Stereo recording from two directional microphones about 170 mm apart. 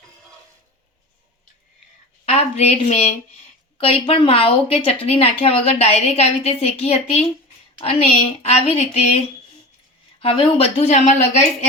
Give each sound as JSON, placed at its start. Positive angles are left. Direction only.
{"t": 2.2, "sound": "a woman's voice", "side_deg": 35}